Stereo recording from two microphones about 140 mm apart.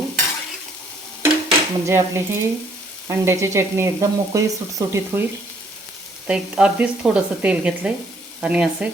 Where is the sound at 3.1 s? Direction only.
20° right (ahead or behind).